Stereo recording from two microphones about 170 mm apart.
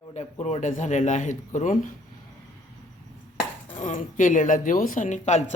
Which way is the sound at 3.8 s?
50° left (ahead or behind).